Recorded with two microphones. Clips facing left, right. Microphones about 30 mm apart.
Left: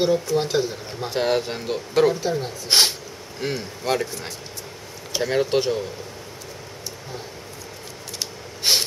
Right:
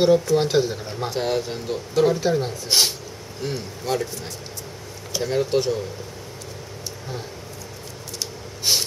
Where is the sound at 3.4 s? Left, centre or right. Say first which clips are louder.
Left 2 dB; left.